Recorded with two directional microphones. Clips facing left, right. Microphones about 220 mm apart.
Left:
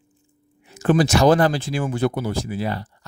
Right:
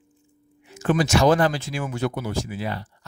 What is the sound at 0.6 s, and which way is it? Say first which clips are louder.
Speech: left 4 dB; 35° left (ahead or behind).